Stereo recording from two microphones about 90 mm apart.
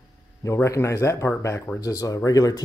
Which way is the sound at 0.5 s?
30° left (ahead or behind).